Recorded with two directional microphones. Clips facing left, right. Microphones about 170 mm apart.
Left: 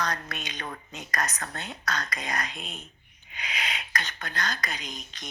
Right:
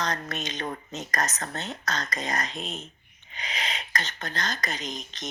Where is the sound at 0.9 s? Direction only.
40° right (ahead or behind).